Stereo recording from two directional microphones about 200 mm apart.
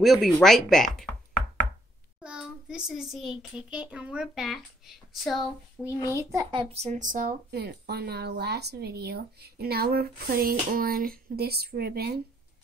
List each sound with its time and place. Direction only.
0.0 s speech: centre (ahead or behind)
2.2 s a child's voice: 5° right (ahead or behind)
6.1 s speech: 20° right (ahead or behind); by 12.2 s 50° right (ahead or behind)